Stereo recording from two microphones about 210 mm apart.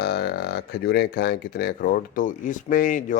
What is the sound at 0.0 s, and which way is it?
Speech, 50° left (ahead or behind).